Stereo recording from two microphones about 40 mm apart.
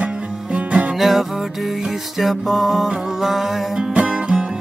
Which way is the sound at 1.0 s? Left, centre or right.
Centre.